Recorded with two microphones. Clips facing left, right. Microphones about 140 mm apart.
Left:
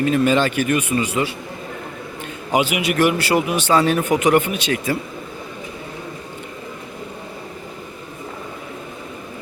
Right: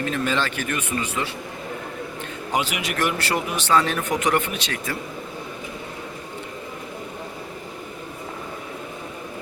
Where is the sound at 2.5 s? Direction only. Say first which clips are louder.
Left 7 dB; 10° left (ahead or behind).